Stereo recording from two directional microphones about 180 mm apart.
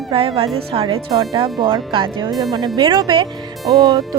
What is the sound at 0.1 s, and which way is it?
A woman's voice, 30° right (ahead or behind).